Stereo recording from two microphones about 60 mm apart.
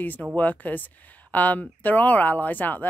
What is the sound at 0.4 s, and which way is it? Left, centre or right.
Speech, left.